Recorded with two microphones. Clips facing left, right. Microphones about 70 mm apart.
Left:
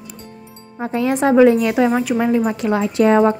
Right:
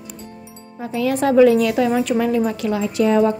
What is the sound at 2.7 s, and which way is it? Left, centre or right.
Speech, left.